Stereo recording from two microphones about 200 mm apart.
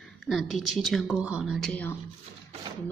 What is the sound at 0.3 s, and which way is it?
Speech, centre (ahead or behind).